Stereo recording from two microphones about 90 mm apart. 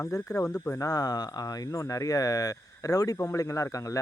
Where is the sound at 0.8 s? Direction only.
45° left (ahead or behind).